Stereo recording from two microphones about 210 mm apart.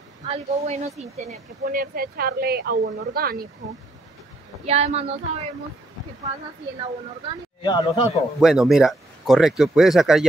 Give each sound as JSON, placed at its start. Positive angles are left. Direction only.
{"t": 0.3, "sound": "speech", "side_deg": -30}
{"t": 4.6, "sound": "speech", "side_deg": -30}
{"t": 7.6, "sound": "speech", "side_deg": 25}
{"t": 8.4, "sound": "speech", "side_deg": 0}